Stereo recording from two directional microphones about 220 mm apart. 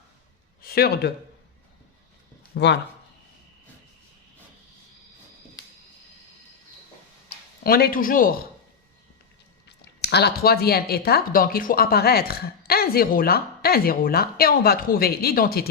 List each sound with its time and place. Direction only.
0.6 s a man's voice: 45° left (ahead or behind)
2.5 s speech: 50° left (ahead or behind)
7.6 s a man's voice: 45° left (ahead or behind)
9.6 s speech: 50° left (ahead or behind)